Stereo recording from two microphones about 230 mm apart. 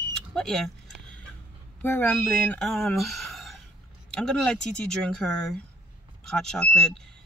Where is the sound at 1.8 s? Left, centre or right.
Centre.